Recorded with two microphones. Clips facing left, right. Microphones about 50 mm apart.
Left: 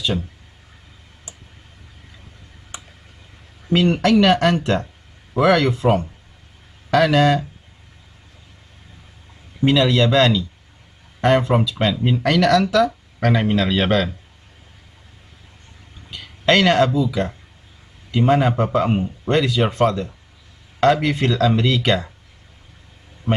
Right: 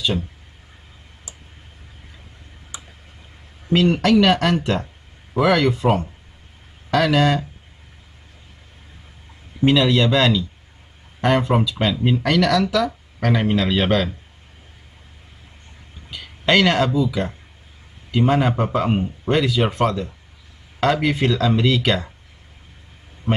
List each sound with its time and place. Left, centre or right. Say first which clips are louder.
3.7 s speech: even; centre
4.2 s speech: left 1 dB; centre
6.9 s speech: left 2 dB; centre
9.6 s speech: even; centre
16.1 s speech: left 1 dB; centre
23.3 s a man's voice: left 1 dB; right